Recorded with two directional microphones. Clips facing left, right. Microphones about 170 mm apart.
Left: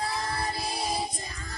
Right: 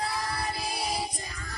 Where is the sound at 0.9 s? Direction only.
25° left (ahead or behind).